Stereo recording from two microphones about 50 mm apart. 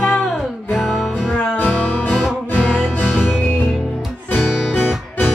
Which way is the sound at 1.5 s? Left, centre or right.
Left.